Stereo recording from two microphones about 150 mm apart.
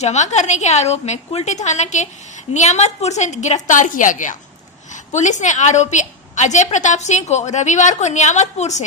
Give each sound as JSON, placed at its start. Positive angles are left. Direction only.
{"t": 0.0, "sound": "a woman's voice", "side_deg": 50}